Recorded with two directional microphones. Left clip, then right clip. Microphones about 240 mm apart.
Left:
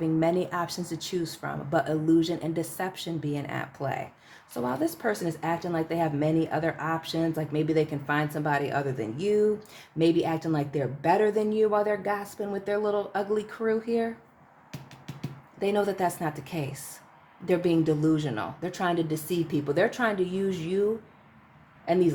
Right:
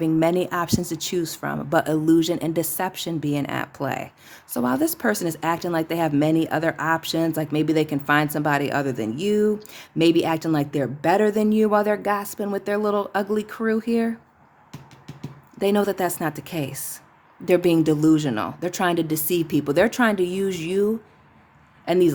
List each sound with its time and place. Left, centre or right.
0.0 s speech: right
15.5 s speech: right